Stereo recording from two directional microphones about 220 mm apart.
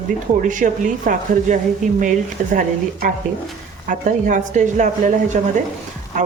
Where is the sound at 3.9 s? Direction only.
35° right (ahead or behind).